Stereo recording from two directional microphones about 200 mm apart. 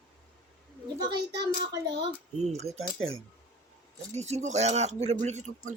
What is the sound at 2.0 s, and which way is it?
Speech, 35° right (ahead or behind).